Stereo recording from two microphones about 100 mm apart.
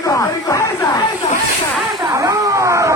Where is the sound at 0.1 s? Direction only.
35° left (ahead or behind).